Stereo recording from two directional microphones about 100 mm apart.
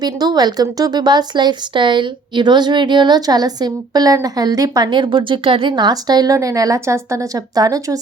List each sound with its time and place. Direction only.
0.0 s speech: 45° right (ahead or behind)
4.9 s a woman's voice: 50° right (ahead or behind)